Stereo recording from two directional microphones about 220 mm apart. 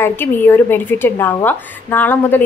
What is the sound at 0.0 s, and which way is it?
A woman's voice, 10° left (ahead or behind).